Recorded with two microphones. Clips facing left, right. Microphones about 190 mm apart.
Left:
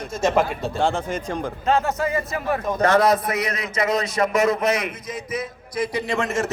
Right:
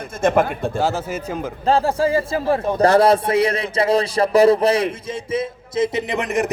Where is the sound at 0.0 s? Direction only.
55° right (ahead or behind).